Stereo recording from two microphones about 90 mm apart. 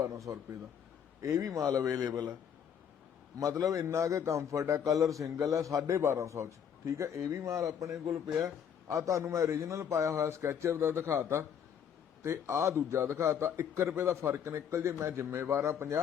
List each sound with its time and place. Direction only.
0.0 s a man's voice: 40° right (ahead or behind)
3.6 s a man's voice: 35° right (ahead or behind)